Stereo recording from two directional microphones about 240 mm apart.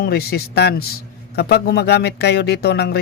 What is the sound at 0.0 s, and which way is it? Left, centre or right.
Speech, left.